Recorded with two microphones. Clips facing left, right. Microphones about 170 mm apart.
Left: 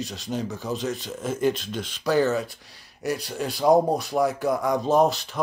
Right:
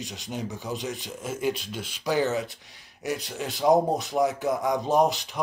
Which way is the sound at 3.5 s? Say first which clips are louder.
Left 2 dB; 20° right (ahead or behind).